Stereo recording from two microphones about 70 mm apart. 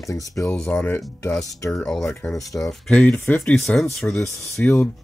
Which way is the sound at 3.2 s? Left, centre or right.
Left.